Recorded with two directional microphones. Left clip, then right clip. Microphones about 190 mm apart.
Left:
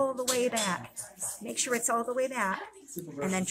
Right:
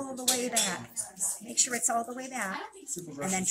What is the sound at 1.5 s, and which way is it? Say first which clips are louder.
Speech: left 1 dB; 50° left (ahead or behind).